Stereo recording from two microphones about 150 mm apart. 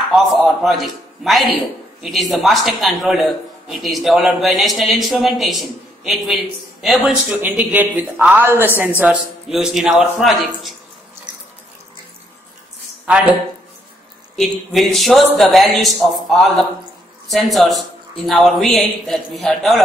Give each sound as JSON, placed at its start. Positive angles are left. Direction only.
{"t": 0.1, "sound": "a sound", "side_deg": 0}
{"t": 2.0, "sound": "a man's voice", "side_deg": 0}
{"t": 13.0, "sound": "a man's voice", "side_deg": -10}